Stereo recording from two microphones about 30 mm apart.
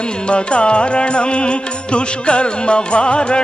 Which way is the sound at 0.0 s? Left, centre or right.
Left.